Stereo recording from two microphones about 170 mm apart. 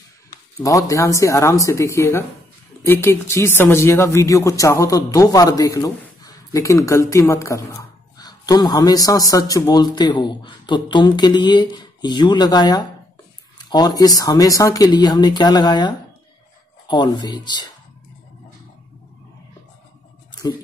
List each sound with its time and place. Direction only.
0.6 s speech: 20° left (ahead or behind)